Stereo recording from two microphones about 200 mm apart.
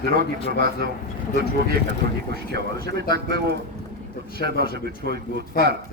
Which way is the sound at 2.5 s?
55° right (ahead or behind).